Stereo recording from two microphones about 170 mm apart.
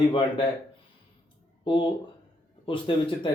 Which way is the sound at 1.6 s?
30° left (ahead or behind).